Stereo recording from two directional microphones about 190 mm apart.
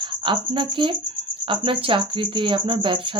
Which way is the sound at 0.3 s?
25° right (ahead or behind).